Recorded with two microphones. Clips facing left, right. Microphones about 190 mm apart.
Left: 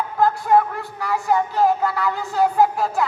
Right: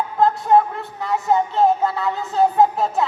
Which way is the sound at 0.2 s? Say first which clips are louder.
Right 1 dB; 20° right (ahead or behind).